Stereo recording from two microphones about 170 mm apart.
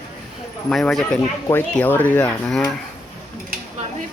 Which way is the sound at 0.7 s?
5° left (ahead or behind).